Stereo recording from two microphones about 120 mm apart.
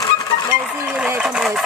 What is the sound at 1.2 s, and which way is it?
Speech, 5° right (ahead or behind).